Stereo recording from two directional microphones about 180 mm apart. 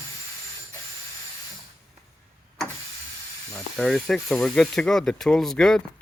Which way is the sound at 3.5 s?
5° left (ahead or behind).